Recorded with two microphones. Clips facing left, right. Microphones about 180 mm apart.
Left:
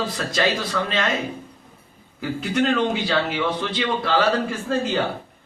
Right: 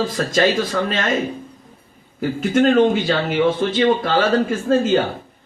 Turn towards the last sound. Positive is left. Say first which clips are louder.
# right 7 dB
turn(degrees=-45)  # may be behind; listen again after turning